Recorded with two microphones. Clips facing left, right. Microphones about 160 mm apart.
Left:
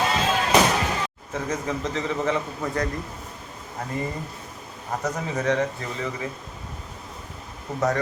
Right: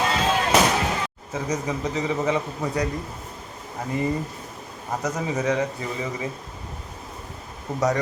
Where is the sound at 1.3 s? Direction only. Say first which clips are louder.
Right 1 dB; 15° right (ahead or behind).